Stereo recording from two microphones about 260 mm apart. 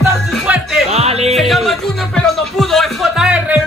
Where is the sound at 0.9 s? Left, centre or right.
Right.